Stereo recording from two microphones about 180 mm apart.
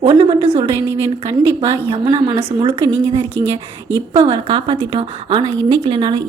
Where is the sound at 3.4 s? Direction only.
85° right.